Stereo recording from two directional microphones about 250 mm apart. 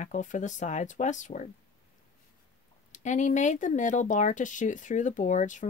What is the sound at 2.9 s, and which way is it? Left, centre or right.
Speech, left.